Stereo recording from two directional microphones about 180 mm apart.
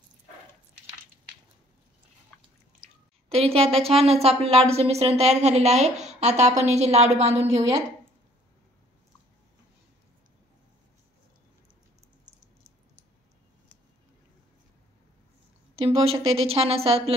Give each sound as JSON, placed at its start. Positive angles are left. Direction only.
{"t": 3.3, "sound": "a woman's voice", "side_deg": -35}
{"t": 15.7, "sound": "a woman's voice", "side_deg": -30}